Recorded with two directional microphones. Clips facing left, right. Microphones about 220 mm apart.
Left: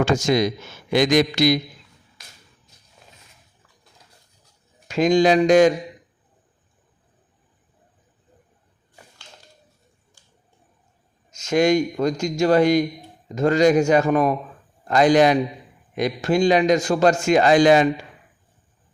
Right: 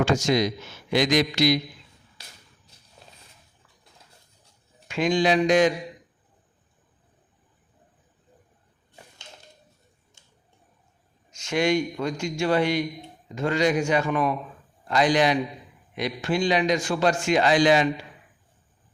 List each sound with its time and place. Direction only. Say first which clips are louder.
0.0 s a man's voice: left 3 dB; 50° left (ahead or behind)
3.0 s a sound: even; 30° right (ahead or behind)
4.9 s a man's voice: left 6 dB; 40° left (ahead or behind)
11.3 s a man's voice: left 5 dB; 40° left (ahead or behind)